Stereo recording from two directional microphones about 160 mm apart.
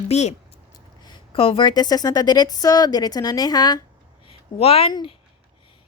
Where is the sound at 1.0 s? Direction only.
30° left (ahead or behind).